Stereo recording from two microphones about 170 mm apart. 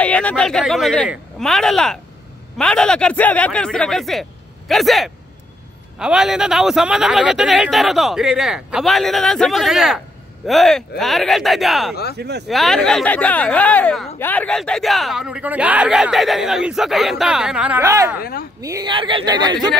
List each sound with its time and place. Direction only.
0.0 s a man's voice: 5° left (ahead or behind)
12.2 s speech: 75° right (ahead or behind)
12.4 s a man's voice: centre (ahead or behind); by 18.2 s 15° right (ahead or behind)
18.2 s a woman's voice: 60° left (ahead or behind)
18.6 s speech: 20° right (ahead or behind)